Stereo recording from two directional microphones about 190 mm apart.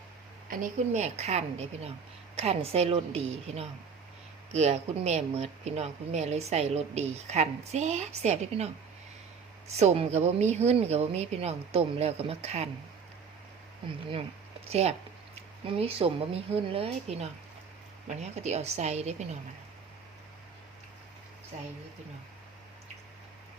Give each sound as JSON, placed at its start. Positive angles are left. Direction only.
{"t": 0.5, "sound": "speech", "side_deg": -40}
{"t": 4.5, "sound": "speech", "side_deg": -35}
{"t": 9.7, "sound": "speech", "side_deg": -35}
{"t": 13.8, "sound": "speech", "side_deg": -30}